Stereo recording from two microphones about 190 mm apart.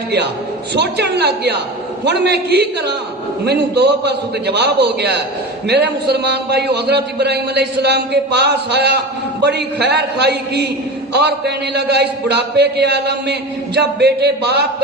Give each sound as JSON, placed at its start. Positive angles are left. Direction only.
{"t": 0.7, "sound": "a man's voice", "side_deg": -60}